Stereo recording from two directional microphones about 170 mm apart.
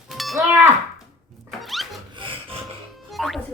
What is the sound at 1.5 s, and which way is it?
Thunk, centre (ahead or behind).